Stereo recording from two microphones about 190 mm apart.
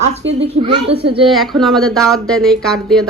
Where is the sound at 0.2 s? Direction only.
75° right (ahead or behind).